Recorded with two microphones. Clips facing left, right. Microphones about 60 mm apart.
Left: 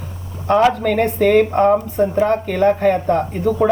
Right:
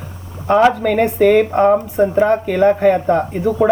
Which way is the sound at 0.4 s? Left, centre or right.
Centre.